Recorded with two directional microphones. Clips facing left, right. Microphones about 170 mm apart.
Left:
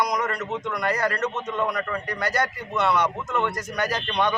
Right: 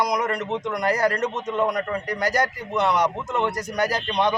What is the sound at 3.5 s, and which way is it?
Speech, 10° right (ahead or behind).